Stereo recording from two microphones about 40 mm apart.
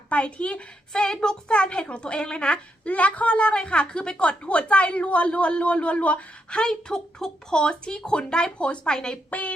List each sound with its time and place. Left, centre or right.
0.1 s a woman's voice: left
2.8 s a woman's voice: left; by 9.1 s centre